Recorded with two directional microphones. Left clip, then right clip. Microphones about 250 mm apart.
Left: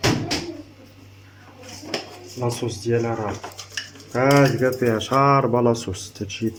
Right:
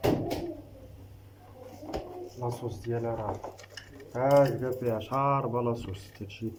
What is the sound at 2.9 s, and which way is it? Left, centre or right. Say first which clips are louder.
Speech: left 9 dB; left.